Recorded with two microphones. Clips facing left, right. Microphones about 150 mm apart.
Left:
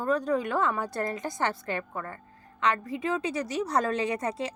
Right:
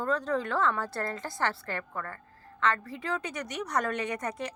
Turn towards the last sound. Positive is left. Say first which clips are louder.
# left 4 dB
turn(degrees=25)  # may be behind; listen again after turning